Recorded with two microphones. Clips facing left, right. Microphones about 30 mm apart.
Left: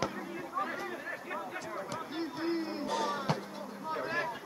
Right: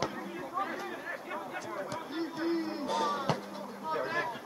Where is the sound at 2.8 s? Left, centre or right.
Centre.